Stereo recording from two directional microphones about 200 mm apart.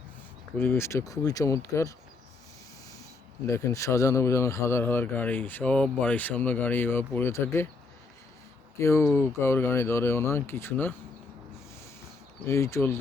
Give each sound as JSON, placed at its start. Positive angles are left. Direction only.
{"t": 0.5, "sound": "a man's voice", "side_deg": 10}
{"t": 3.4, "sound": "a man's voice", "side_deg": 15}
{"t": 8.8, "sound": "a man's voice", "side_deg": 15}
{"t": 12.5, "sound": "a man's voice", "side_deg": 15}